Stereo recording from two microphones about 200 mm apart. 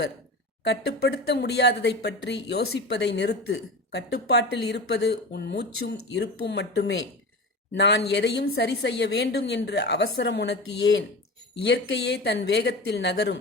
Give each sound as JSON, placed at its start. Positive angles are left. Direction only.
{"t": 0.6, "sound": "speech", "side_deg": 60}